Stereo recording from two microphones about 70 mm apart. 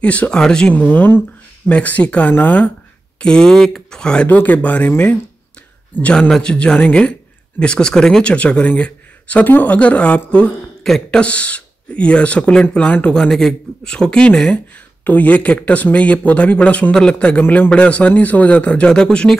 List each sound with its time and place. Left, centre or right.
0.0 s a man's voice: centre
0.8 s speech: left
3.2 s a man's voice: centre
4.3 s speech: left
6.1 s a man's voice: centre
15.0 s a man's voice: left